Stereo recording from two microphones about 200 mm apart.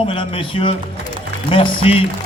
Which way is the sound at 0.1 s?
25° left (ahead or behind).